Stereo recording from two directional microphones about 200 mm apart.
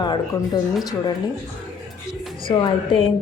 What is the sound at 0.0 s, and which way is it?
Speech, 20° left (ahead or behind).